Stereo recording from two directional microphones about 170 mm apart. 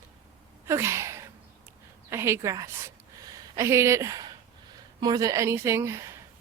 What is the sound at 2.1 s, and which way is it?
A woman's voice, 15° right (ahead or behind).